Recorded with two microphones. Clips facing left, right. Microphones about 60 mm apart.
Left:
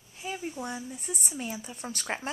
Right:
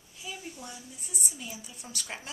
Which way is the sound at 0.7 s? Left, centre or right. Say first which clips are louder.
Left 7 dB; left.